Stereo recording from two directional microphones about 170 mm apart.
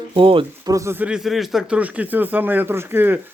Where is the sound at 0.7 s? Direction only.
15° right (ahead or behind).